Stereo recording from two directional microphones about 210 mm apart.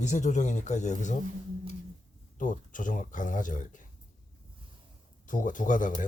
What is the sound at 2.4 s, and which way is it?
Speech, 40° left (ahead or behind).